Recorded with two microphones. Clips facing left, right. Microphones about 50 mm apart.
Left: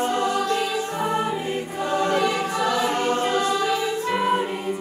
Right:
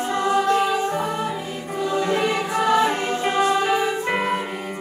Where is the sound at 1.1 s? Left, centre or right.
Centre.